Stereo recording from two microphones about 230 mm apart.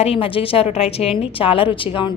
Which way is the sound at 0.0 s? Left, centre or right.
Left.